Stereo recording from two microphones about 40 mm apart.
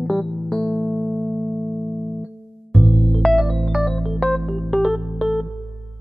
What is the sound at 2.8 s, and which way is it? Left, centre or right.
Music, centre.